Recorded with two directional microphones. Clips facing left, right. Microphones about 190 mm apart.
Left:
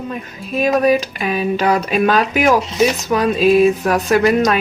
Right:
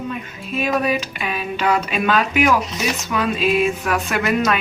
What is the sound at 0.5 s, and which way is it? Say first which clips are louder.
Speech: left 6 dB; 40° left (ahead or behind).